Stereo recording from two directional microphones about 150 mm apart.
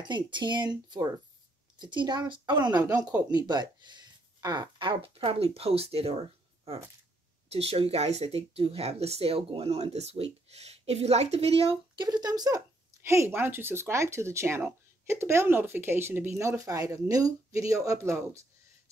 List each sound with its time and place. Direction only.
0.0 s speech: 30° right (ahead or behind)
7.4 s speech: 40° right (ahead or behind); by 18.4 s 20° right (ahead or behind)